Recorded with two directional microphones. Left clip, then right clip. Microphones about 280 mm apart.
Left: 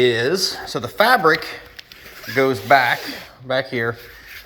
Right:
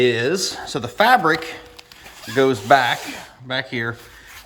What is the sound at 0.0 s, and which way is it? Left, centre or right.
Speech, centre.